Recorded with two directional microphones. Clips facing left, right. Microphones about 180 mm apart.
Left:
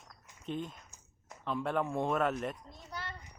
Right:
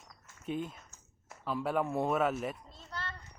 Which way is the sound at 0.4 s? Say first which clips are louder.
Right 2 dB; 5° right (ahead or behind).